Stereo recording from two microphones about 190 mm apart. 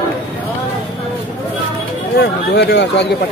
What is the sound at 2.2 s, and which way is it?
Speech, 60° left (ahead or behind).